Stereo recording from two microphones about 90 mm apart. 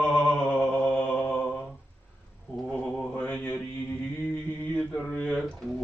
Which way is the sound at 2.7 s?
15° left (ahead or behind).